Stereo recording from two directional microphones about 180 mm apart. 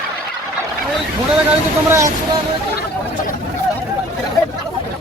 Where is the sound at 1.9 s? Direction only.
15° right (ahead or behind).